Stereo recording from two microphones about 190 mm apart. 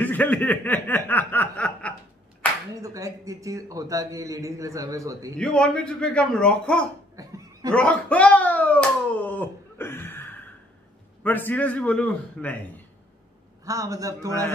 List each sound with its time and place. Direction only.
0.0 s speech: 10° left (ahead or behind)
2.7 s a man's voice: 20° right (ahead or behind)
5.4 s a man's voice: 5° left (ahead or behind)
7.2 s laughter: 15° right (ahead or behind)
7.7 s speech: 5° left (ahead or behind)
11.2 s speech: 10° left (ahead or behind)
13.7 s a man's voice: 20° right (ahead or behind)